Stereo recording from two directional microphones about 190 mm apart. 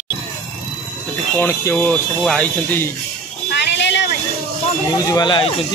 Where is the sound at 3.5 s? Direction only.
65° left (ahead or behind).